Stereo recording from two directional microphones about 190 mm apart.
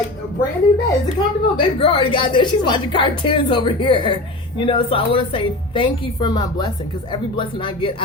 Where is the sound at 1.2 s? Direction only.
30° left (ahead or behind).